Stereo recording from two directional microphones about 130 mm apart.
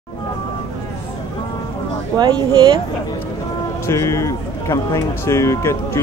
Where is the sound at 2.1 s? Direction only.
35° right (ahead or behind).